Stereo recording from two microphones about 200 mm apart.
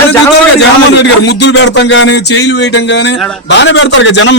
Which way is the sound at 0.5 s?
60° left (ahead or behind).